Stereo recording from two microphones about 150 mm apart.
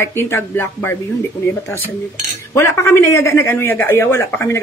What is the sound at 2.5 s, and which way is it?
Speech, 20° left (ahead or behind).